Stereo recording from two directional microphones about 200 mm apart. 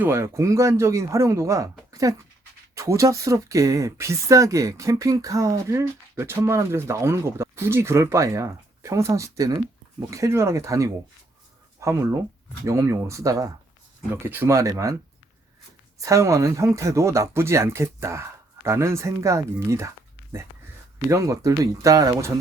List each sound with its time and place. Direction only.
0.0 s speech: 10° right (ahead or behind)
1.9 s a sound: 15° right (ahead or behind)
2.7 s speech: 15° right (ahead or behind)
16.0 s speech: 15° right (ahead or behind)
21.1 s speech: 15° right (ahead or behind)